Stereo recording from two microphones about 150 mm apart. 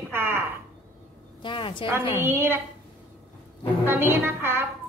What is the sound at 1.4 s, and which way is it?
Speech, 35° left (ahead or behind).